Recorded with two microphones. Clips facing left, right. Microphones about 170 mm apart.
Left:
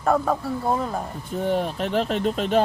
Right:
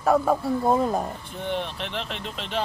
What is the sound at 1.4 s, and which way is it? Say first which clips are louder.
Speech: left 6 dB; 45° left (ahead or behind).